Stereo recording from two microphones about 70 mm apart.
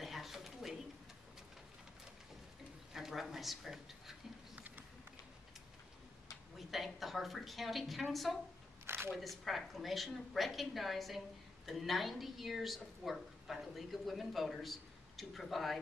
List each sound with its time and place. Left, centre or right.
0.0 s a sound: centre
2.9 s speech: centre
4.6 s a sound: right
6.7 s a woman's voice: centre
8.8 s single-lens reflex camera: right
9.2 s a woman's voice: centre